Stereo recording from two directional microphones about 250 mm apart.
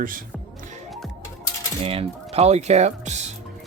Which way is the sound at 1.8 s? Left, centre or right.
Right.